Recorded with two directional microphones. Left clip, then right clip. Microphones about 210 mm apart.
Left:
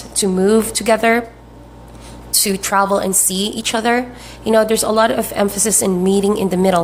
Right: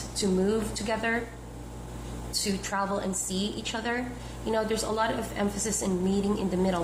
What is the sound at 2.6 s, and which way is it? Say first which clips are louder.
Speech: left 17 dB; 50° left (ahead or behind).